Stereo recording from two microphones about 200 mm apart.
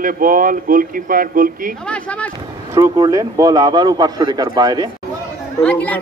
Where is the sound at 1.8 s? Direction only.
5° left (ahead or behind).